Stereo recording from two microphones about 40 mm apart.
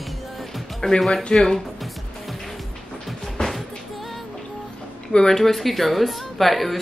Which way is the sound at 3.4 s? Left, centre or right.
Centre.